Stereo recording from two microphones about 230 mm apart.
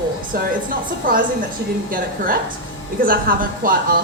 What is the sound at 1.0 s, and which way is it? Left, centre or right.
Speech, right.